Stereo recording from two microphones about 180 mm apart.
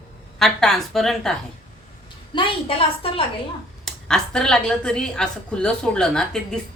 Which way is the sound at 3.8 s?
5° left (ahead or behind).